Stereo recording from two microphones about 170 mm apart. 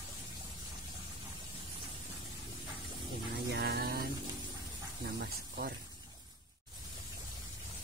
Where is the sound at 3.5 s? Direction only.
70° right (ahead or behind).